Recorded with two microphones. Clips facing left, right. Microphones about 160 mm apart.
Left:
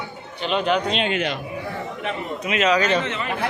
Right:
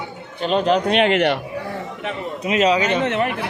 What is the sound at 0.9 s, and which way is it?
Speech, 75° right (ahead or behind).